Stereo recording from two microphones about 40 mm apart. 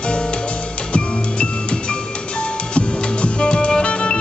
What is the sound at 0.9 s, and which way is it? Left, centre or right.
Music, left.